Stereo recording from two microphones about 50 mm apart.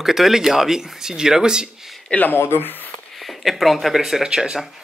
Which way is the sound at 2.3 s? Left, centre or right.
Left.